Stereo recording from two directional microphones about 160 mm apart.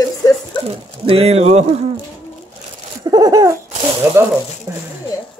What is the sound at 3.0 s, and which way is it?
Laughter, 25° right (ahead or behind).